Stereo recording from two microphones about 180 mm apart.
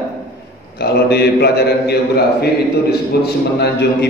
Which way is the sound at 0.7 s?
65° left (ahead or behind).